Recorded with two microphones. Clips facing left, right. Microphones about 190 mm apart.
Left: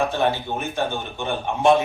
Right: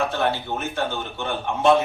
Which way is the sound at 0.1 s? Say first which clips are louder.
Left 2 dB; 15° left (ahead or behind).